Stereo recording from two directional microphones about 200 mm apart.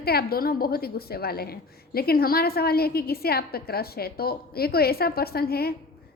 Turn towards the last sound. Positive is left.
turn(degrees=50)  # may be behind; listen again after turning